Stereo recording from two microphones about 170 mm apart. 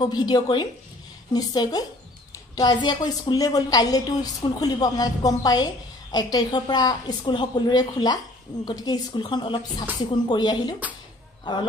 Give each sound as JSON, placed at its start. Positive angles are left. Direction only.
{"t": 0.0, "sound": "a woman's voice", "side_deg": 25}